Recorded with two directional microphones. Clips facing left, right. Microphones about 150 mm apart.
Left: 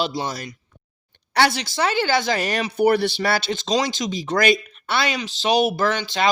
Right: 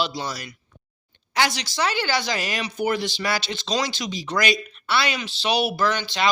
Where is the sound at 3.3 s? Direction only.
50° left (ahead or behind).